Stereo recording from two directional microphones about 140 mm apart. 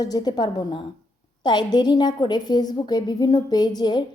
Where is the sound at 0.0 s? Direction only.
30° left (ahead or behind).